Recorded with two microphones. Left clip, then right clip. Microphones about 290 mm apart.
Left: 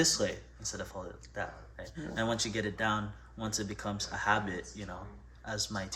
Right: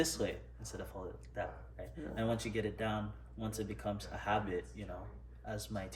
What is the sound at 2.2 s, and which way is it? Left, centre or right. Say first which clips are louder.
Speech: left 4 dB; centre.